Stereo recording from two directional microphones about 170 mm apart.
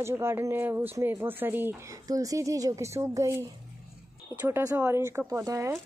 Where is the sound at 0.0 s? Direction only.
15° right (ahead or behind).